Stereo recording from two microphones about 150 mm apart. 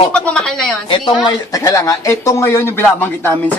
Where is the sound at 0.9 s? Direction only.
35° left (ahead or behind).